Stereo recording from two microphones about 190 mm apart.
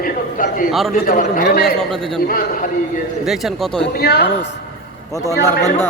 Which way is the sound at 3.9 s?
60° left (ahead or behind).